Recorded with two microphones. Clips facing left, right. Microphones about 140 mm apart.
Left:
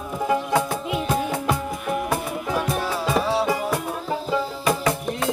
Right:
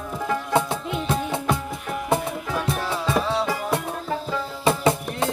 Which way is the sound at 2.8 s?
5° left (ahead or behind).